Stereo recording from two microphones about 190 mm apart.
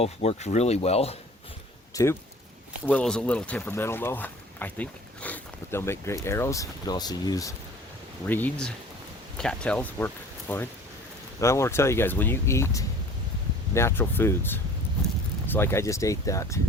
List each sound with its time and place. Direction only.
0.0 s speech: 35° left (ahead or behind)
2.8 s speech: 5° left (ahead or behind)
8.3 s speech: 10° left (ahead or behind)